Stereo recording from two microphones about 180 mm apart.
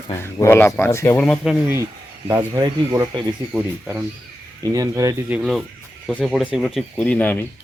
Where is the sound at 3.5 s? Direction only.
10° right (ahead or behind).